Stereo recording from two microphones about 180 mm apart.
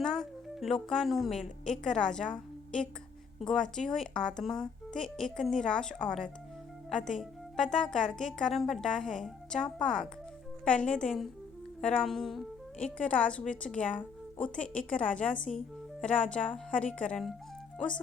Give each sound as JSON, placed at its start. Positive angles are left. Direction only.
{"t": 0.0, "sound": "a woman's voice", "side_deg": 5}